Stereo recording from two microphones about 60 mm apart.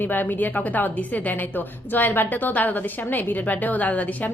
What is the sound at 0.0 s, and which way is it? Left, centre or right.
A woman's voice, left.